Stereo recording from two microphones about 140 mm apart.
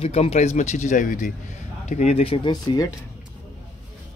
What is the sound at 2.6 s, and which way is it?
Speech, 30° left (ahead or behind).